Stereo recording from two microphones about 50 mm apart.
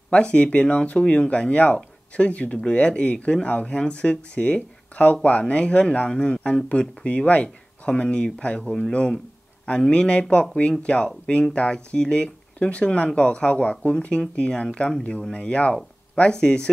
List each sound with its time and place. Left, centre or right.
0.1 s speech: left